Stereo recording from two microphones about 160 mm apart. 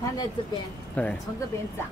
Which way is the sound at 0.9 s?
10° left (ahead or behind).